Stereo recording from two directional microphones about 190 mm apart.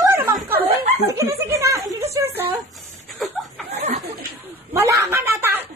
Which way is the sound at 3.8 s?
35° right (ahead or behind).